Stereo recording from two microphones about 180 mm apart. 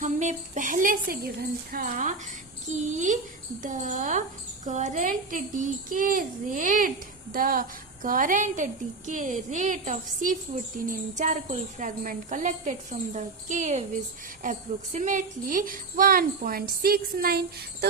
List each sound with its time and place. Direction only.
0.0 s speech: 40° right (ahead or behind); by 17.8 s 60° right (ahead or behind)